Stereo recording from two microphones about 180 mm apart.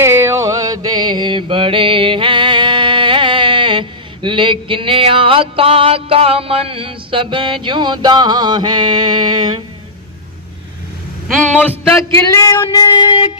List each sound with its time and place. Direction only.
0.0 s mantra: 15° right (ahead or behind)
11.3 s speech: 5° left (ahead or behind)
12.1 s music: 15° left (ahead or behind)